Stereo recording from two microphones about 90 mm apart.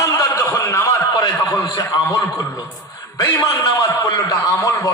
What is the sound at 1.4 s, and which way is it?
A man's voice, 45° left (ahead or behind).